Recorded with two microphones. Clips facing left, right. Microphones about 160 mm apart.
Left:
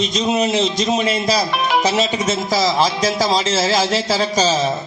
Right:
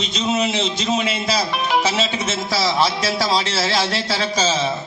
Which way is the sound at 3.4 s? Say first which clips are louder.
Left 4 dB; 20° left (ahead or behind).